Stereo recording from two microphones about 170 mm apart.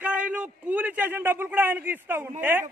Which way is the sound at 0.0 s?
10° right (ahead or behind).